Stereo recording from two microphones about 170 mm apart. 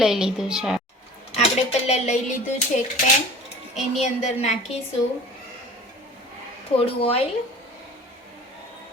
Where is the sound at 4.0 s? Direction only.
40° left (ahead or behind).